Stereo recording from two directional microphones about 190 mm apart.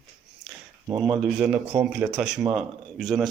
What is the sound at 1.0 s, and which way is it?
Speech, 5° right (ahead or behind).